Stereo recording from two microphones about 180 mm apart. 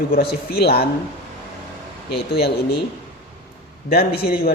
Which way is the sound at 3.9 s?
60° left (ahead or behind).